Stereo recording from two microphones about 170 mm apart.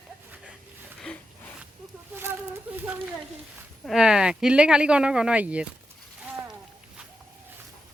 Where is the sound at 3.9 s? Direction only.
5° right (ahead or behind).